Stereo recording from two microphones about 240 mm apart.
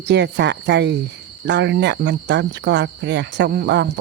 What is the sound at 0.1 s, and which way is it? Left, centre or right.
Cricket, right.